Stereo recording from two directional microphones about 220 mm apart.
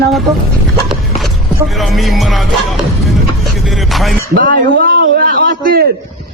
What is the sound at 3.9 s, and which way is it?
Music, centre (ahead or behind).